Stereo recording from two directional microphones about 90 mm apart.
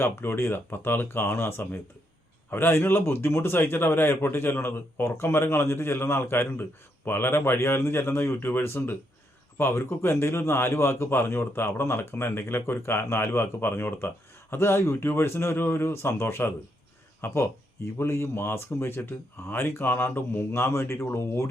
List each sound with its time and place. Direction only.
0.0 s a man's voice: 25° left (ahead or behind)